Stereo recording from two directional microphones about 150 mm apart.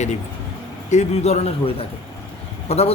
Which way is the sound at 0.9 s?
50° left (ahead or behind).